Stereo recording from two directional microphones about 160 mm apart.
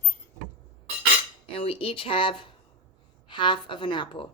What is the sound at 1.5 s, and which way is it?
Speech, 35° left (ahead or behind).